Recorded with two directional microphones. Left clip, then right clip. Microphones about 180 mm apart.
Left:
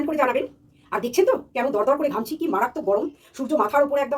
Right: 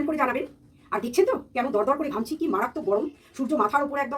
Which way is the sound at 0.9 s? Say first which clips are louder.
Left 3 dB; centre (ahead or behind).